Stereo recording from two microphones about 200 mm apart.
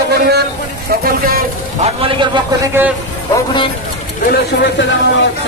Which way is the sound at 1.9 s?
25° right (ahead or behind).